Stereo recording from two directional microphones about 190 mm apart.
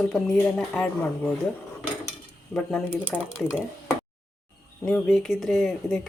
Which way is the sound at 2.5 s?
5° left (ahead or behind).